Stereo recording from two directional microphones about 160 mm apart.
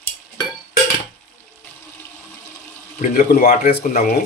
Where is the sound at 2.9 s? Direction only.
55° left (ahead or behind).